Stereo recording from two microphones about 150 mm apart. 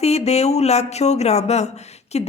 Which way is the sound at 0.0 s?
45° left (ahead or behind).